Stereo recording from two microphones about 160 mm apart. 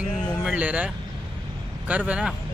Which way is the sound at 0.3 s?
5° left (ahead or behind).